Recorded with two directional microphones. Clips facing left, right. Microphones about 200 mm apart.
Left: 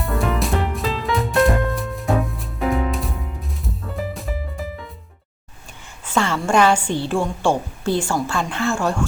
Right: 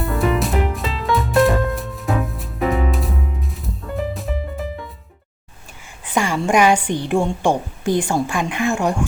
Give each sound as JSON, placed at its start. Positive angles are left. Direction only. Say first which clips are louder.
{"t": 0.0, "sound": "music", "louder": "right 3 dB", "side_deg": 0}
{"t": 6.1, "sound": "a woman's voice", "louder": "right 1 dB", "side_deg": -15}